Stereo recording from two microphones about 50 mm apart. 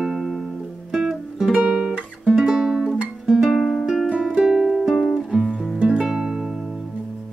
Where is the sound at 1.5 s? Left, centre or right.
Right.